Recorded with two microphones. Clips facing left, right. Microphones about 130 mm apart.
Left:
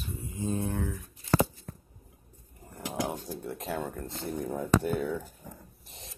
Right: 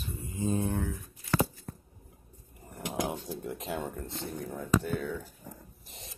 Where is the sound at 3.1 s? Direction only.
45° left (ahead or behind).